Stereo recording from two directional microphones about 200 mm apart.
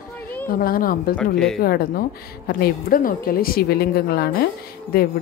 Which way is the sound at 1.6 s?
50° left (ahead or behind).